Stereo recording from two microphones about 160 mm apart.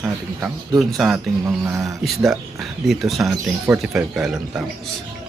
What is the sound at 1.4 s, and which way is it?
Speech, 15° right (ahead or behind).